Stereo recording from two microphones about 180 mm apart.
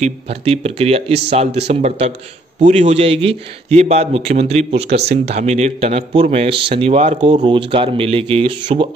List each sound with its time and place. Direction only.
0.0 s speech: 35° right (ahead or behind)